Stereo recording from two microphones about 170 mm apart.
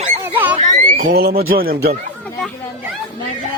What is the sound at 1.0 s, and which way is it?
Speech, 60° right (ahead or behind).